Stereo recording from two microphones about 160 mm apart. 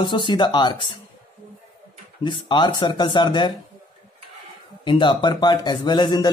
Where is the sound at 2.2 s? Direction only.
30° left (ahead or behind).